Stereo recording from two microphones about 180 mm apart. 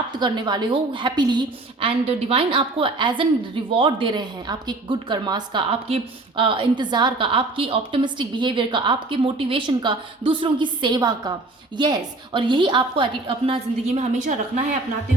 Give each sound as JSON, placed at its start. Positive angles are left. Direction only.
{"t": 0.1, "sound": "a woman's voice", "side_deg": -25}